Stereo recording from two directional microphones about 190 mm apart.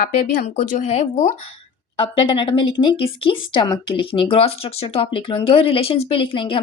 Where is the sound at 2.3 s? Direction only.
25° left (ahead or behind).